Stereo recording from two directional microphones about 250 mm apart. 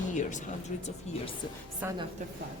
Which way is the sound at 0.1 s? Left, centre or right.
Left.